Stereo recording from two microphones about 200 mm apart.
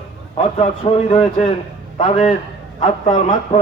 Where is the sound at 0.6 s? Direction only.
35° left (ahead or behind).